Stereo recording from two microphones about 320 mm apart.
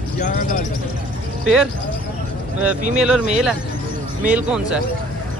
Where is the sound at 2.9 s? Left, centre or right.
Centre.